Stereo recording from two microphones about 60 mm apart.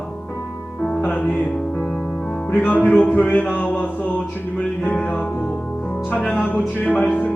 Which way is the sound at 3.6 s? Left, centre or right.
Left.